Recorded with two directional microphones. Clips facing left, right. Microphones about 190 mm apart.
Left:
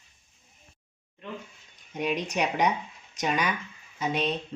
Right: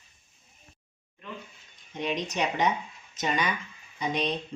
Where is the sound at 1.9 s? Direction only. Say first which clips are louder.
Left 2 dB; 10° left (ahead or behind).